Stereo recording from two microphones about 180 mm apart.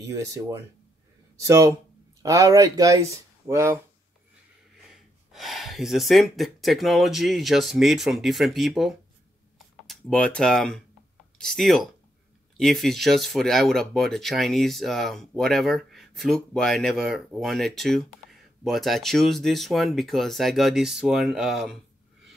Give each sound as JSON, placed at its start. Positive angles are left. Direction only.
{"t": 0.0, "sound": "speech", "side_deg": -20}
{"t": 5.3, "sound": "speech", "side_deg": 0}